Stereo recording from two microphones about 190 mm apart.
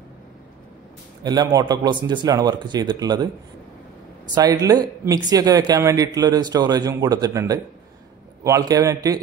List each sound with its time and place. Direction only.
1.2 s speech: 20° right (ahead or behind)
4.4 s speech: 20° right (ahead or behind)